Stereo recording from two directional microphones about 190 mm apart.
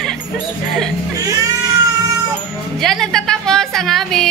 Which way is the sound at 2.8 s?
Centre (ahead or behind).